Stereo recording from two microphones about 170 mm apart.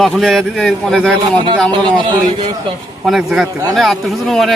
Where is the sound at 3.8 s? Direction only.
Centre (ahead or behind).